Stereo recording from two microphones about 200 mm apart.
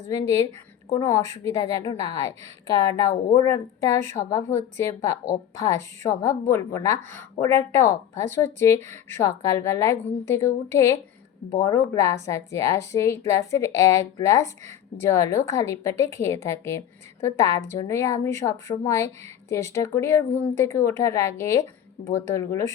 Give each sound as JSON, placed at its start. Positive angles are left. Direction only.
{"t": 0.1, "sound": "a woman's voice", "side_deg": 15}